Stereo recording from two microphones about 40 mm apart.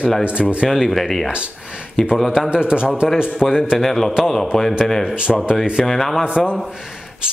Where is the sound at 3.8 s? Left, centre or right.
Centre.